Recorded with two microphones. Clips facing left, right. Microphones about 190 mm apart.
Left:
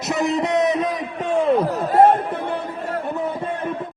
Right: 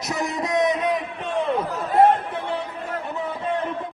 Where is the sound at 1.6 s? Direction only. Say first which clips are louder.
Left 5 dB; 35° left (ahead or behind).